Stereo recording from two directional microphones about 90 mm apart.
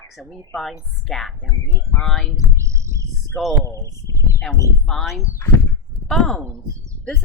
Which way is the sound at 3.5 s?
35° left (ahead or behind).